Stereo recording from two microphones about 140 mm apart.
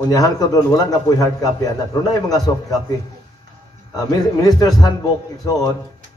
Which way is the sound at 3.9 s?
25° left (ahead or behind).